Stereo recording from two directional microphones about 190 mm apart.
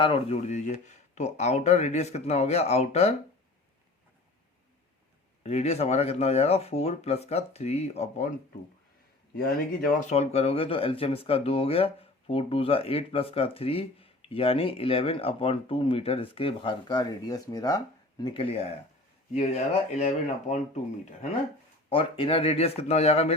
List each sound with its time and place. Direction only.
0.0 s speech: 30° left (ahead or behind)
5.4 s speech: 35° left (ahead or behind)
10.0 s speech: 35° left (ahead or behind)